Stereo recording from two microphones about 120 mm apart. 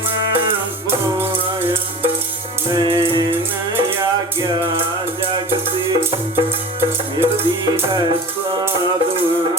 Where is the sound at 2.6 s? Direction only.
30° right (ahead or behind).